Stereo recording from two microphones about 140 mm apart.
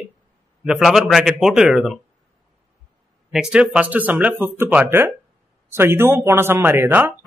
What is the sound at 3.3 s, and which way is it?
Speech, 5° right (ahead or behind).